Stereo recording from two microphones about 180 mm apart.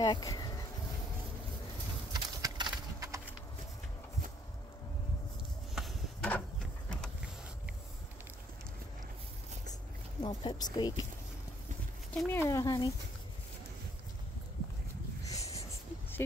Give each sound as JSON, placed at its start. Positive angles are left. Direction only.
{"t": 0.0, "sound": "bee", "side_deg": 20}
{"t": 2.1, "sound": "horse", "side_deg": -25}
{"t": 5.8, "sound": "a sound", "side_deg": 0}
{"t": 10.2, "sound": "speech", "side_deg": 25}
{"t": 12.1, "sound": "speech", "side_deg": 10}
{"t": 15.2, "sound": "a sound", "side_deg": 20}